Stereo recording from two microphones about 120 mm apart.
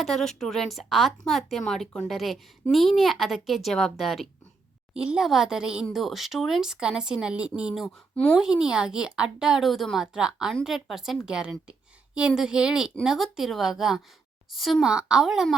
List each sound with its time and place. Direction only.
0.0 s a woman's voice: centre (ahead or behind)
8.1 s a woman's voice: 15° left (ahead or behind)
8.4 s a woman's voice: 5° right (ahead or behind)